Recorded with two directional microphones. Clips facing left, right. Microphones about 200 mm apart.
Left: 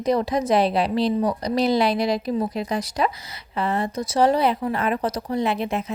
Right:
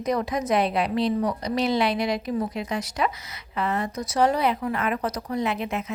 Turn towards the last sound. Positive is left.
turn(degrees=30)  # may be behind; listen again after turning